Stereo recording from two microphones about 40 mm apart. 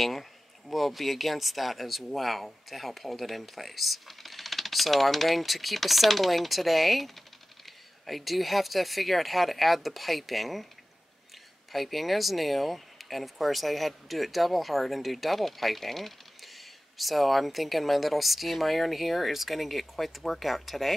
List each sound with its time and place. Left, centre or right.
0.0 s speech: centre
11.7 s speech: centre